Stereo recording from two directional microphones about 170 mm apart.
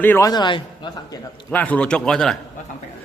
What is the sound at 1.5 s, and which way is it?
Speech, 10° left (ahead or behind).